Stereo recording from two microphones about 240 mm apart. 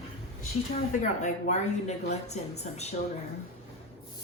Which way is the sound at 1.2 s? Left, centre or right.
Left.